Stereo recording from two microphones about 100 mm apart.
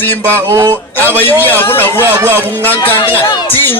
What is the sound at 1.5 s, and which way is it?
Music, 20° left (ahead or behind).